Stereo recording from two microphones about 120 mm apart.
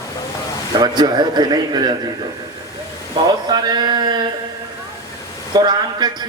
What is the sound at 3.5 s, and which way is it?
Speech, 35° right (ahead or behind).